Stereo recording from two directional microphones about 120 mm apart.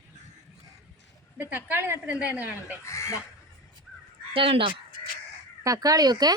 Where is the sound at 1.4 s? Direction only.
15° right (ahead or behind).